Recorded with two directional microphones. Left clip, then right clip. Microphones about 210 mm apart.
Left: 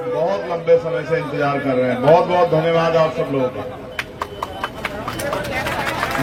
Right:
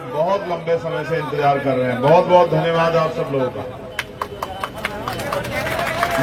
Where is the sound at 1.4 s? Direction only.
30° right (ahead or behind).